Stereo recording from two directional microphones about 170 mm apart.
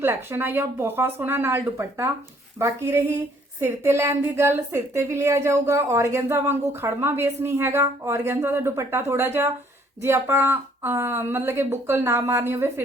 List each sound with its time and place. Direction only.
0.0 s a woman's voice: 15° right (ahead or behind)